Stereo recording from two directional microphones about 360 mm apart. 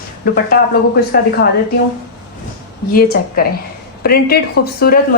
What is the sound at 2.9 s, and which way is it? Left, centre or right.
A woman's voice, left.